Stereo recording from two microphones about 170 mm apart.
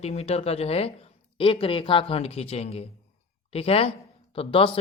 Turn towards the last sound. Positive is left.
turn(degrees=30)  # may be behind; listen again after turning